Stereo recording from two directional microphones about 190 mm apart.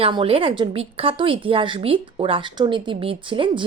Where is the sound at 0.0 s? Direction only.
30° right (ahead or behind).